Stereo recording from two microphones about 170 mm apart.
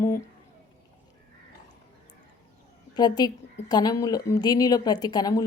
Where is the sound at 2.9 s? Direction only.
25° left (ahead or behind).